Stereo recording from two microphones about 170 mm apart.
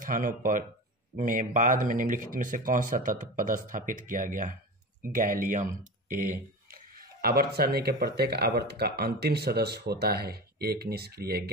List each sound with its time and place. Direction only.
0.0 s speech: 55° right (ahead or behind)